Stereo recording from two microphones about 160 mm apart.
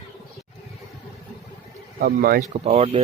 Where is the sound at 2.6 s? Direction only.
40° right (ahead or behind).